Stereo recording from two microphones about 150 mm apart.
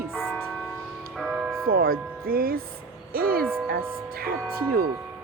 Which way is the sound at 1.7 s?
90° right.